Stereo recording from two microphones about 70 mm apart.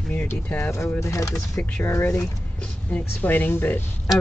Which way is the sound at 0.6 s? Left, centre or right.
Left.